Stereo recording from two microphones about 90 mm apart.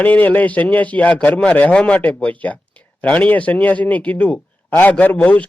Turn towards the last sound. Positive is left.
turn(degrees=15)  # may be behind; listen again after turning